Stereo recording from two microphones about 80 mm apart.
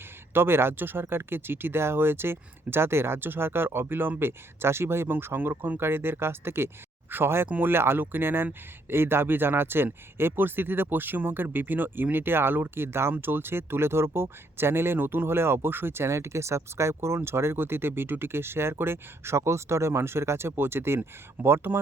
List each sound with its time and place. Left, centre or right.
0.3 s speech: right
7.4 s speech: centre
7.7 s speech: right